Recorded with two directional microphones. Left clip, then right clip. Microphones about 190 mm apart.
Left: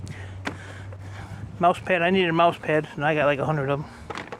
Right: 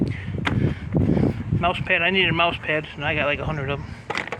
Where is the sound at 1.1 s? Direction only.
45° left (ahead or behind).